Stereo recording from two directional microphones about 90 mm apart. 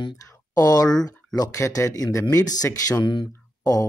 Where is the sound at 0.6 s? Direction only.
45° left (ahead or behind).